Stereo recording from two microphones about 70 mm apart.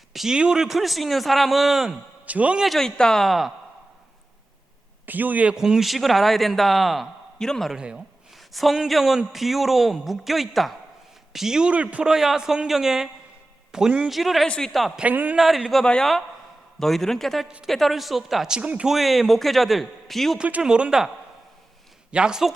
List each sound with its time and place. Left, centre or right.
0.1 s a man's voice: centre
2.2 s a man's voice: right
2.7 s speech: centre
5.0 s a man's voice: right
5.5 s speech: centre
7.7 s a man's voice: centre
14.4 s speech: centre
14.7 s speech: centre
14.9 s a man's voice: right
15.4 s speech: centre
15.8 s speech: centre
18.9 s speech: centre
20.4 s a man's voice: centre
22.1 s a man's voice: centre